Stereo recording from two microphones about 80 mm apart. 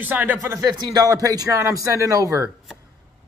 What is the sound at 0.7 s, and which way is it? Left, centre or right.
Speech, right.